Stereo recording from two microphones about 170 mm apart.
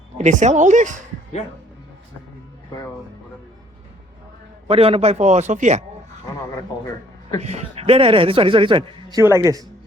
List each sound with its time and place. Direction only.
0.2 s a man's voice: 45° right (ahead or behind)
4.7 s a man's voice: 35° right (ahead or behind)
7.4 s speech: 40° right (ahead or behind); by 9.6 s 20° right (ahead or behind)